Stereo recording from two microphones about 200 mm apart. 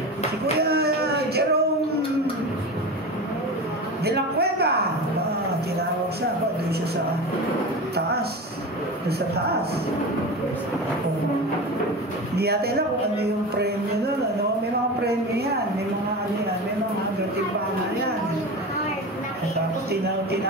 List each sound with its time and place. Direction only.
0.6 s music: 55° right (ahead or behind)
4.0 s a sound: 50° right (ahead or behind)
12.4 s speech: 50° right (ahead or behind)